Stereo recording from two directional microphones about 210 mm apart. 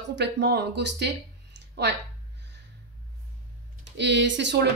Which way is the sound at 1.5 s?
55° right (ahead or behind).